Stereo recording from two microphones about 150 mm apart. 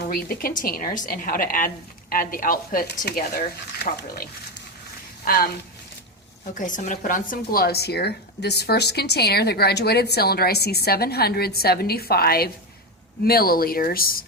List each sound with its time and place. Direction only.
0.0 s a woman's voice: 85° left
5.2 s speech: 80° left
6.4 s speech: 60° left (ahead or behind); by 14.3 s 75° left (ahead or behind)